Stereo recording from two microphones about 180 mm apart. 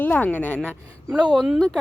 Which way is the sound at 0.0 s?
10° left (ahead or behind).